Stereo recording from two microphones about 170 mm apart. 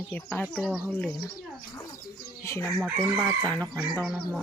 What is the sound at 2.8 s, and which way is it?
Chicken, 5° right (ahead or behind).